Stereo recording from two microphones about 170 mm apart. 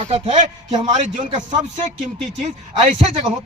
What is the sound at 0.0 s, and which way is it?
Speech, 40° right (ahead or behind).